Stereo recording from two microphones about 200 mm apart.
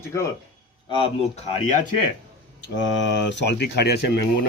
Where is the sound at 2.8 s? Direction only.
65° left (ahead or behind).